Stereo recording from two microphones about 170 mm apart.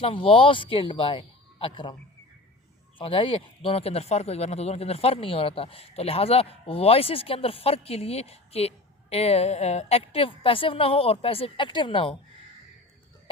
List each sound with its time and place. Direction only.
0.0 s speech: 30° left (ahead or behind)
3.0 s speech: 30° left (ahead or behind)